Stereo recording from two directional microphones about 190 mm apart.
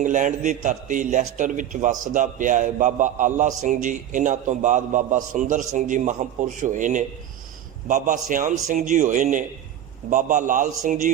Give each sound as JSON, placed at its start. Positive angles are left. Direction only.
{"t": 0.0, "sound": "a man's voice", "side_deg": -40}